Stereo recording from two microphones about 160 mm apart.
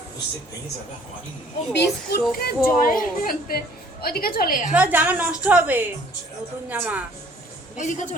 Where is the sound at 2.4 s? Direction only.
65° left (ahead or behind).